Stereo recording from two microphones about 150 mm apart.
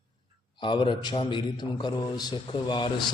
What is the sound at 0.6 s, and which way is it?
A man's voice, 35° left (ahead or behind).